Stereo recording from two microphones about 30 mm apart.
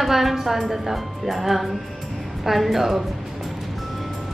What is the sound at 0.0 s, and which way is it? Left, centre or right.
A woman's voice, centre.